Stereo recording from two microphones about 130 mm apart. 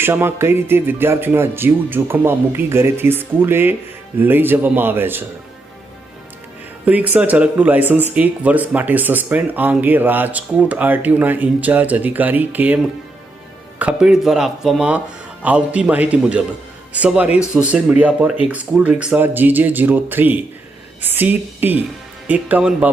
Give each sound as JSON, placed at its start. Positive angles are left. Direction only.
{"t": 0.0, "sound": "speech", "side_deg": -20}
{"t": 6.8, "sound": "speech", "side_deg": -10}